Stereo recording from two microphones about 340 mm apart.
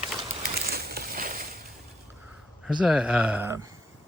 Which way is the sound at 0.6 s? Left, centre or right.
Right.